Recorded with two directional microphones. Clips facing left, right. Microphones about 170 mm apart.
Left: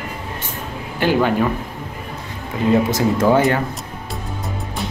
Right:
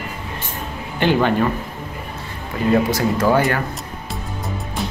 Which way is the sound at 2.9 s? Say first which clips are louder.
Left 2 dB; 20° left (ahead or behind).